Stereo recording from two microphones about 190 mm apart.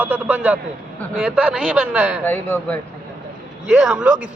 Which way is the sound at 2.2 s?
5° left (ahead or behind).